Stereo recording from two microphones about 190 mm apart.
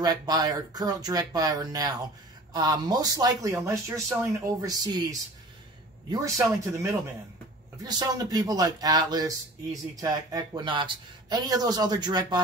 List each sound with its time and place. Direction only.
0.0 s speech: 20° right (ahead or behind)
6.1 s speech: 15° right (ahead or behind)